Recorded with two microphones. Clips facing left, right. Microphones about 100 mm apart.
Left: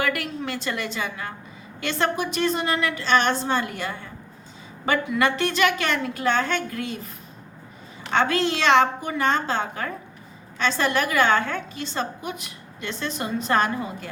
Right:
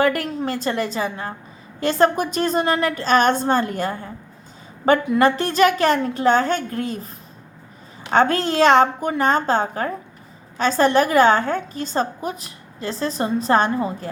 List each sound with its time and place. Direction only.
0.0 s a woman's voice: 40° right (ahead or behind)
8.1 s a woman's voice: 40° right (ahead or behind)